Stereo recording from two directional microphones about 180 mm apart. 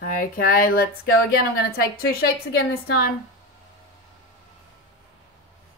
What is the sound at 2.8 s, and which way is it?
Speech, 60° left (ahead or behind).